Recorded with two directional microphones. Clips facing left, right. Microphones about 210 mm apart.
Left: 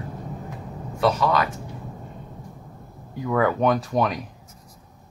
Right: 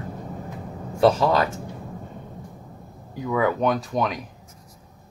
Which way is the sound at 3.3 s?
Centre (ahead or behind).